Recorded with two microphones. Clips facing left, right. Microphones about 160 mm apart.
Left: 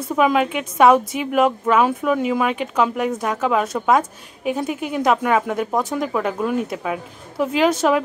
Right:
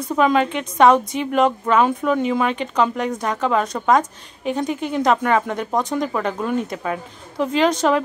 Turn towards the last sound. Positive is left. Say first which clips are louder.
# even
turn(degrees=5)  # may be behind; listen again after turning